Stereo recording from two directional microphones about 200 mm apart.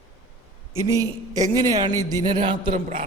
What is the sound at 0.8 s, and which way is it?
A man's voice, 15° right (ahead or behind).